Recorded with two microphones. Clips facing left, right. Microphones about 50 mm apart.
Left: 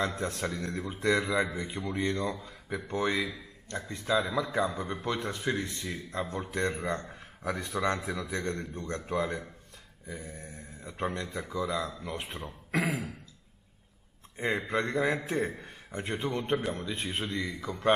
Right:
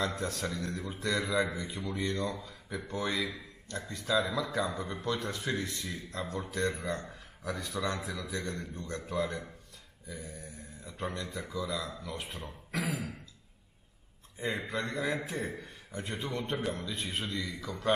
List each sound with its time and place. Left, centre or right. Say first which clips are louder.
0.0 s a man's voice: left 2 dB; left
14.7 s a man's voice: left 6 dB; left